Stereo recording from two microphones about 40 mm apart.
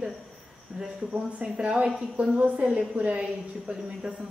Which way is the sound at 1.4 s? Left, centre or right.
Right.